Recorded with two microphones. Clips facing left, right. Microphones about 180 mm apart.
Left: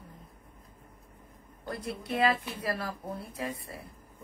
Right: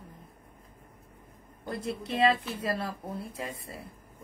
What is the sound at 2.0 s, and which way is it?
Speech, 25° right (ahead or behind).